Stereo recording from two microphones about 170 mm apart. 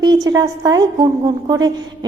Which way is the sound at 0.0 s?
25° right (ahead or behind).